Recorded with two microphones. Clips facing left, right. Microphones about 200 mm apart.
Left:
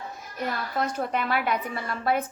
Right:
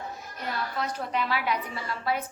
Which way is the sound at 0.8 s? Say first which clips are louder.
Left 4 dB; 50° left (ahead or behind).